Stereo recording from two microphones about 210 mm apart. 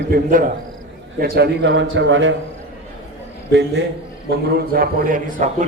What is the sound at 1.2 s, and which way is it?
A man's voice, 50° right (ahead or behind).